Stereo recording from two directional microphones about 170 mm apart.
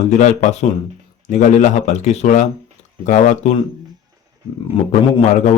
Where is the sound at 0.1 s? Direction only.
45° left (ahead or behind).